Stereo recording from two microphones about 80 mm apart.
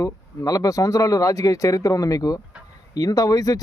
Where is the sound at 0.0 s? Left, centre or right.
Left.